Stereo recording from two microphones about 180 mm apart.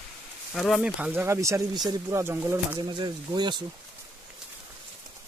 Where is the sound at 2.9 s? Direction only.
25° right (ahead or behind).